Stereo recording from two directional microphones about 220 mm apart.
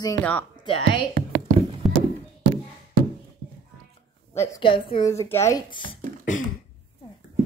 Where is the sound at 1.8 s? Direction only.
Centre (ahead or behind).